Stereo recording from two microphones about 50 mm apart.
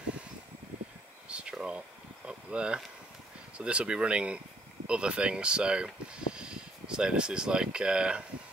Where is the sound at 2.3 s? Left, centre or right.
Centre.